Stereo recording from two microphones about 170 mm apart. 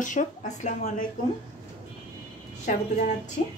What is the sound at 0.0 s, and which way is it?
Speech, 50° left (ahead or behind).